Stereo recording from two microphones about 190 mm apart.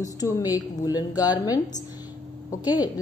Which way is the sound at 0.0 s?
20° left (ahead or behind).